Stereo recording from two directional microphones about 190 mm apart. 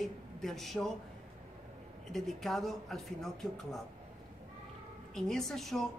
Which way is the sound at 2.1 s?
Centre (ahead or behind).